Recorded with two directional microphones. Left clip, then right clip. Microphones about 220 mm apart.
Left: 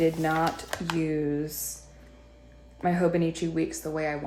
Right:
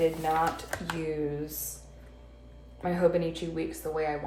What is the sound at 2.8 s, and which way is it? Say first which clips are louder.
Speech: left 1 dB; 35° left (ahead or behind).